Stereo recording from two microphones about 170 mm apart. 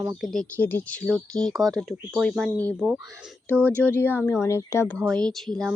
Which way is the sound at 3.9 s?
10° left (ahead or behind).